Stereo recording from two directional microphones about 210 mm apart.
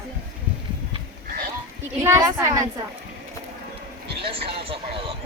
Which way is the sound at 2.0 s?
15° right (ahead or behind).